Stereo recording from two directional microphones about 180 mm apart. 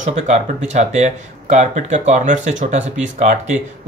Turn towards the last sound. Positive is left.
turn(degrees=-40)  # may be behind; listen again after turning